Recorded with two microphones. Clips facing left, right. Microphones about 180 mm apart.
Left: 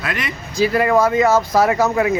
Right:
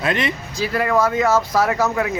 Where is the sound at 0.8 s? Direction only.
10° left (ahead or behind).